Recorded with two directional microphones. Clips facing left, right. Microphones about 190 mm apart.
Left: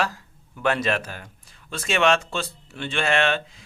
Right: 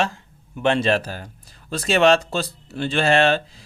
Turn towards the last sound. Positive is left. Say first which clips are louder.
# right 5 dB
turn(degrees=-35)  # may be behind; listen again after turning